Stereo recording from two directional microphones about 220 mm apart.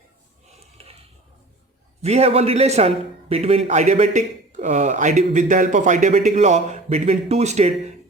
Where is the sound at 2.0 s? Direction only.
30° right (ahead or behind).